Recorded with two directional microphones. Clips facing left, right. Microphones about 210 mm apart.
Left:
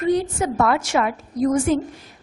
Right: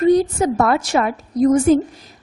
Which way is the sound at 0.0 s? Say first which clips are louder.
Right 6 dB; 40° right (ahead or behind).